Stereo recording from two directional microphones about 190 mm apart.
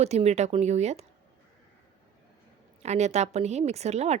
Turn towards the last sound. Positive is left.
turn(degrees=-35)  # may be behind; listen again after turning